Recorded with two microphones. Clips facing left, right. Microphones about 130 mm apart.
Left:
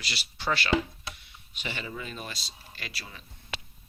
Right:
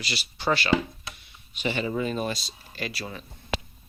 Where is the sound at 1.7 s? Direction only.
40° right (ahead or behind).